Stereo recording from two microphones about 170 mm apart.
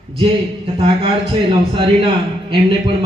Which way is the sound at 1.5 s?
30° right (ahead or behind).